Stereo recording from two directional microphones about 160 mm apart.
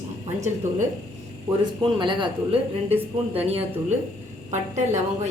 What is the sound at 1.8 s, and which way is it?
A man's voice, 30° right (ahead or behind).